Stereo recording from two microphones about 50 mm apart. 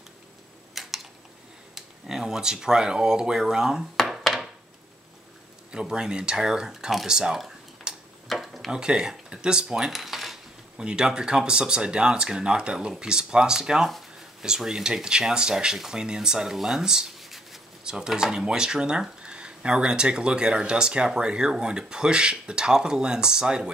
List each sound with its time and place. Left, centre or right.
0.8 s a sound: centre
1.8 s speech: centre
3.9 s a sound: centre
5.7 s speech: centre
7.9 s tick-tock: centre
8.3 s a sound: centre
8.7 s speech: centre
10.8 s speech: centre
17.2 s writing: centre
17.8 s speech: centre